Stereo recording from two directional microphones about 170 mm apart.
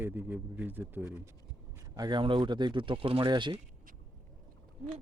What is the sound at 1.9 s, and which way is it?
Speech, 25° right (ahead or behind).